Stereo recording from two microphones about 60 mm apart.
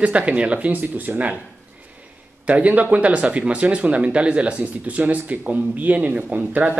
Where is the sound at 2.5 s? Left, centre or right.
Right.